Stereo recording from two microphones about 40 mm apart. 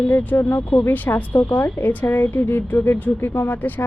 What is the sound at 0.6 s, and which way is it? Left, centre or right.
Speech, left.